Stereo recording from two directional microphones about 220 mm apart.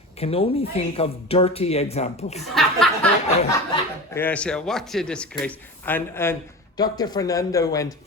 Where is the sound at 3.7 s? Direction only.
10° left (ahead or behind).